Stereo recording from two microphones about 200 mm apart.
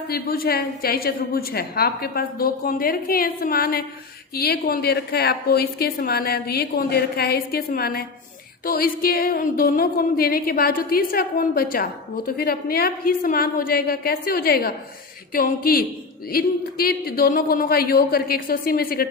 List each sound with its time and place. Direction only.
0.1 s a woman's voice: 50° left (ahead or behind)